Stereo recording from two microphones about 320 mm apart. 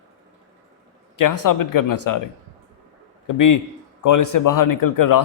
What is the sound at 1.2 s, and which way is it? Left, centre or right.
A man's voice, left.